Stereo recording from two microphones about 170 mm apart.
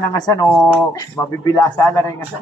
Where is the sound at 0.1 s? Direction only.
20° left (ahead or behind).